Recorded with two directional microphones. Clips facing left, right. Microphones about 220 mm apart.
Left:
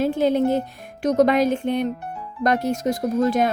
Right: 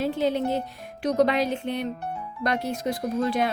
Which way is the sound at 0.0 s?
50° left (ahead or behind).